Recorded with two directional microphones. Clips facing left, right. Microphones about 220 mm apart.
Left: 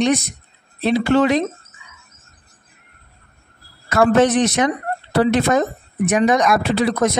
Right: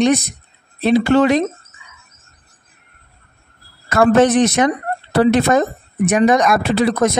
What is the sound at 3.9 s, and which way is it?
Speech, 50° right (ahead or behind).